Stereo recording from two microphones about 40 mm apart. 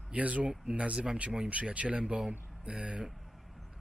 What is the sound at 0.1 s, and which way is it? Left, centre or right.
Speech, right.